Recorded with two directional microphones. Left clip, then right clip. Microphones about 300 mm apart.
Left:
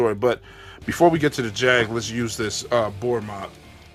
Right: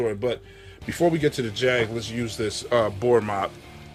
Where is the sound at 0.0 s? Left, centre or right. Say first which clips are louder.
Left 5 dB; centre.